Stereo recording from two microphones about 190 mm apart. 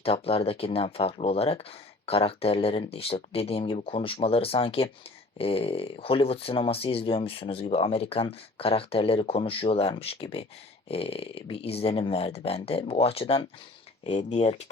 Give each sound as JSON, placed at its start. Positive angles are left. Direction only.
{"t": 0.0, "sound": "speech", "side_deg": 30}